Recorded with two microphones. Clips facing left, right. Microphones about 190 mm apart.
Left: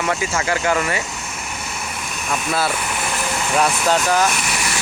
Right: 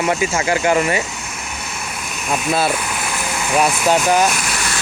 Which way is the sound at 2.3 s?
20° right (ahead or behind).